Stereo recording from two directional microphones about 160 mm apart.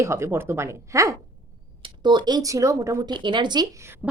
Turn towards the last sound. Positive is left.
turn(degrees=-10)  # may be behind; listen again after turning